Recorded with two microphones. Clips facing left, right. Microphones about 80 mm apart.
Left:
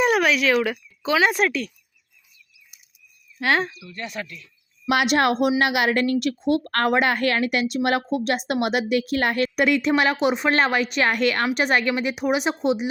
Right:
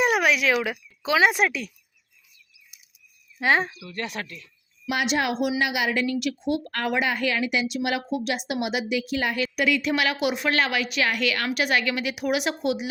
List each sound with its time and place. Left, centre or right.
0.0 s speech: centre
3.3 s speech: centre
3.8 s speech: right
4.9 s a woman's voice: left
6.7 s a woman's voice: left